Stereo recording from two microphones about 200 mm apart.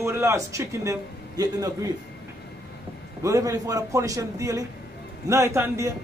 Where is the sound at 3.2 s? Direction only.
15° right (ahead or behind).